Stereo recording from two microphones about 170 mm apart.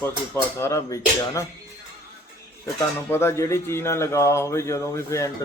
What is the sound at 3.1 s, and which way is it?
Speech, 15° left (ahead or behind).